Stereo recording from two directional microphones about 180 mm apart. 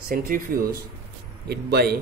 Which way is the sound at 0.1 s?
50° right (ahead or behind).